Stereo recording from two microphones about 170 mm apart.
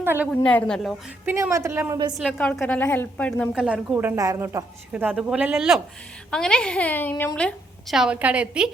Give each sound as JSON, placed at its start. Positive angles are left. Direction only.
{"t": 0.0, "sound": "a woman's voice", "side_deg": -15}
{"t": 0.4, "sound": "a woman's voice", "side_deg": 5}
{"t": 1.2, "sound": "a woman's voice", "side_deg": -15}
{"t": 2.1, "sound": "a woman's voice", "side_deg": 5}
{"t": 3.5, "sound": "a woman's voice", "side_deg": -5}